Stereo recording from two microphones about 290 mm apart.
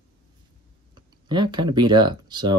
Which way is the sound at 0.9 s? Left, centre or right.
Centre.